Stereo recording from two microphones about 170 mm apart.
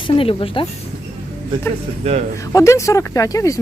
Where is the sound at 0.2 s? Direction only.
30° left (ahead or behind).